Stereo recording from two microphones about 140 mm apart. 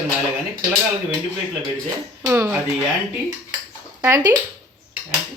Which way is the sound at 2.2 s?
20° right (ahead or behind).